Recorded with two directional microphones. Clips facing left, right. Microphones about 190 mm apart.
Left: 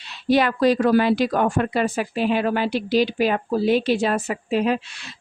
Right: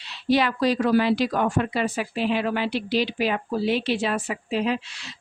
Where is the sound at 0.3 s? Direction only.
50° left (ahead or behind).